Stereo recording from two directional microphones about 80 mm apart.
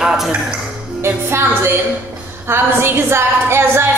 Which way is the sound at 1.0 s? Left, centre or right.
Right.